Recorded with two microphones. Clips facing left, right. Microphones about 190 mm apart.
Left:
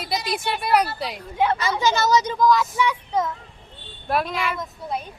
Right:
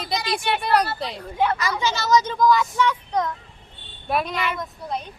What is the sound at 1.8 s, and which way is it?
Speech, 50° left (ahead or behind).